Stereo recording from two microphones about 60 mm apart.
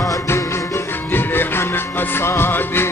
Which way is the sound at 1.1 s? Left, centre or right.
Left.